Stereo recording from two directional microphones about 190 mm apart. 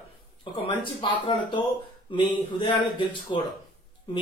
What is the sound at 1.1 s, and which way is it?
Speech, 25° left (ahead or behind).